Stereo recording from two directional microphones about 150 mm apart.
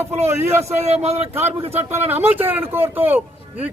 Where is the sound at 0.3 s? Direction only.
15° right (ahead or behind).